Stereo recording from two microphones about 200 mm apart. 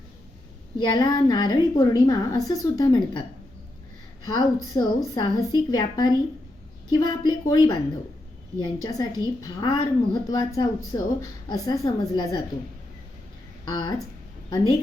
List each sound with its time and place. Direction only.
0.8 s a woman's voice: 20° left (ahead or behind)
4.3 s a woman's voice: 20° left (ahead or behind)
13.7 s a woman's voice: 20° left (ahead or behind)